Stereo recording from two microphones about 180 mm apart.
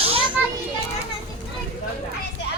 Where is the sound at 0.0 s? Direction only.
30° right (ahead or behind).